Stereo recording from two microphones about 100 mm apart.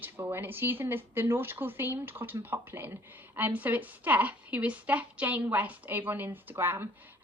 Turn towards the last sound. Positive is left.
turn(degrees=-20)  # may be behind; listen again after turning